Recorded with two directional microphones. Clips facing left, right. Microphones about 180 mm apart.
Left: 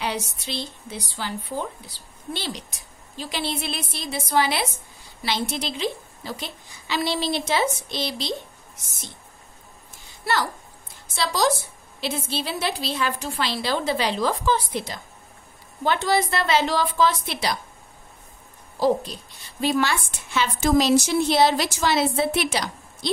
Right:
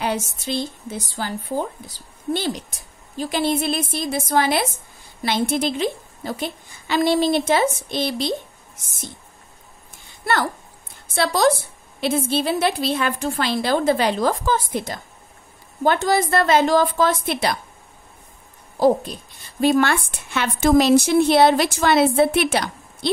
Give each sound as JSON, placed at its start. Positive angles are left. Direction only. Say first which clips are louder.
{"t": 0.0, "sound": "speech", "louder": "right 4 dB", "side_deg": -50}
{"t": 11.1, "sound": "speech", "louder": "right 5 dB", "side_deg": -55}
{"t": 19.6, "sound": "speech", "louder": "right 5 dB", "side_deg": -50}